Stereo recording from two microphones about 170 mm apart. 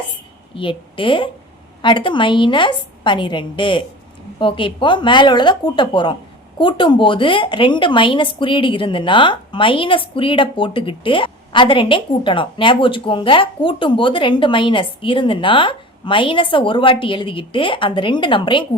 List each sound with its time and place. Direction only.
0.5 s a woman's voice: 30° left (ahead or behind)